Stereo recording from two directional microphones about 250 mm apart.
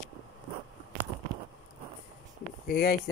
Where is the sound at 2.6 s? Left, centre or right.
Left.